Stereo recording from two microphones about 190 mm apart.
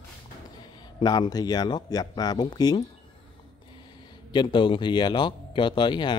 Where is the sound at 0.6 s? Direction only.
20° left (ahead or behind).